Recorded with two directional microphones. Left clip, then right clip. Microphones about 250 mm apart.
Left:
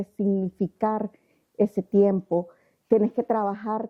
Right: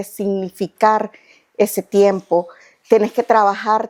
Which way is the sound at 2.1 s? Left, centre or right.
Right.